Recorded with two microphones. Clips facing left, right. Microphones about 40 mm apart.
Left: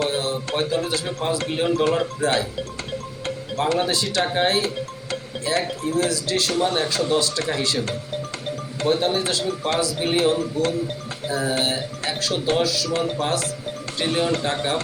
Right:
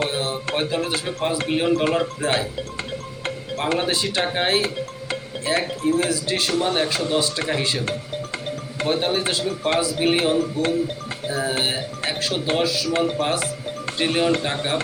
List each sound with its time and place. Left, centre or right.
0.0 s music: right
0.7 s a man's voice: right
8.8 s a man's voice: right